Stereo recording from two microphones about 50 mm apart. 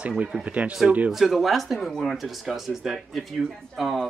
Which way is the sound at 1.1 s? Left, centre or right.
Centre.